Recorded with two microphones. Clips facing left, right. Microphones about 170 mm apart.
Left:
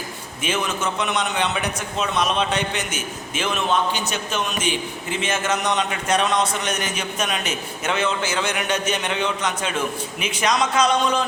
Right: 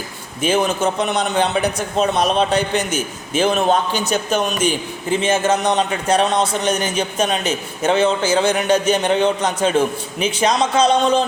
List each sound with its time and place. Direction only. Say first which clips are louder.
0.4 s a man's voice: right 7 dB; 35° right (ahead or behind)